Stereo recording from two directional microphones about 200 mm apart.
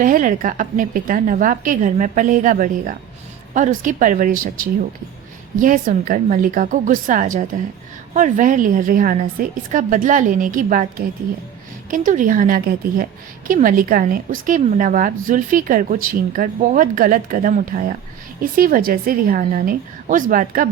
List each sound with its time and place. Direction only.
0.0 s a woman's voice: 40° right (ahead or behind)